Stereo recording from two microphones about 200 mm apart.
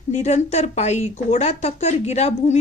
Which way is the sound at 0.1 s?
35° left (ahead or behind).